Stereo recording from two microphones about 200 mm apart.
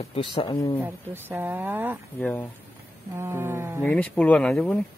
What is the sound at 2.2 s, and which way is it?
Speech, 10° left (ahead or behind).